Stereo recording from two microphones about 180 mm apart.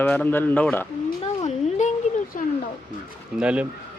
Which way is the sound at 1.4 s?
40° left (ahead or behind).